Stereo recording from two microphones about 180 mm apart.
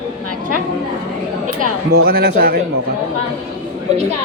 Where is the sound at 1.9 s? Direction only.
60° right (ahead or behind).